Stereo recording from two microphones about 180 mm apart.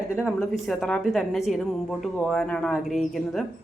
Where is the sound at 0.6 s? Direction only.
Centre (ahead or behind).